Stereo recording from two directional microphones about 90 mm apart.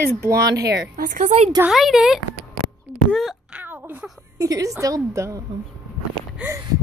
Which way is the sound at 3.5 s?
20° right (ahead or behind).